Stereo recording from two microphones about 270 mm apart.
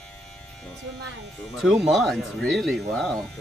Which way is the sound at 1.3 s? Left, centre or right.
Centre.